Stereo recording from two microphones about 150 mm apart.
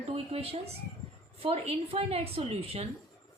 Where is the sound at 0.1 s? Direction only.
40° right (ahead or behind).